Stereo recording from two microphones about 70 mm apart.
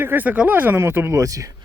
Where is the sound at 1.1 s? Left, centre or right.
Right.